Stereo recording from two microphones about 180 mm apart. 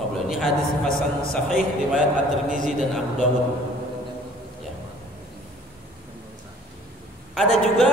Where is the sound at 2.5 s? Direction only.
45° right (ahead or behind).